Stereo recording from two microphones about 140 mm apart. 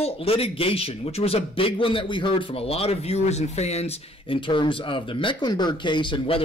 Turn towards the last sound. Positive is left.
turn(degrees=40)  # may be behind; listen again after turning